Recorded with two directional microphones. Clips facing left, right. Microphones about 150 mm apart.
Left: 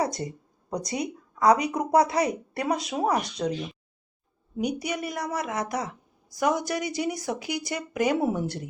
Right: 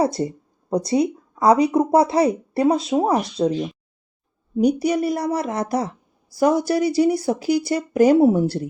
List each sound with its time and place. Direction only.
0.0 s speech: 30° right (ahead or behind)